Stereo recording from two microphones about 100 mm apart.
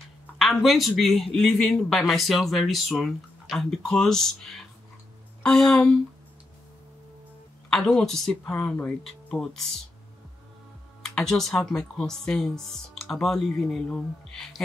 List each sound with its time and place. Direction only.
0.4 s a man's voice: centre (ahead or behind)
7.7 s speech: 5° left (ahead or behind)
11.0 s a man's voice: 5° left (ahead or behind)